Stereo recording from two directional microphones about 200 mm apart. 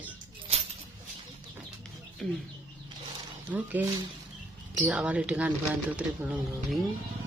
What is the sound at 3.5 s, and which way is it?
Speech, 15° right (ahead or behind).